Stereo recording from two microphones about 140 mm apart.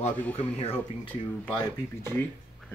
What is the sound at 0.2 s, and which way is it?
Speech, 10° left (ahead or behind).